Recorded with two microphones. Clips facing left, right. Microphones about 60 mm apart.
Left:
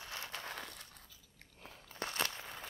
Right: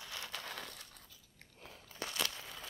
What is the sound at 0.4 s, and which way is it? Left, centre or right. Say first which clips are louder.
Crushing: left 1 dB; centre.